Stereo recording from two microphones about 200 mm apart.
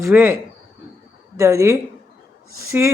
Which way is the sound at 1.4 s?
15° right (ahead or behind).